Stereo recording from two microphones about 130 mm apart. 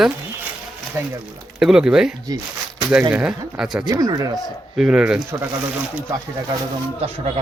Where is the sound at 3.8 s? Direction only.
30° right (ahead or behind).